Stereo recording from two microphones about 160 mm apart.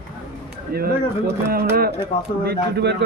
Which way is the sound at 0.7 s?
75° right (ahead or behind).